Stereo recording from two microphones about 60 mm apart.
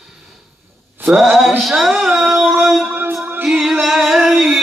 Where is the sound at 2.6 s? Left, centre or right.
Centre.